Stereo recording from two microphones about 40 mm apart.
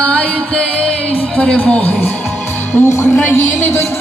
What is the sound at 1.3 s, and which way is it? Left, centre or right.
Speech, left.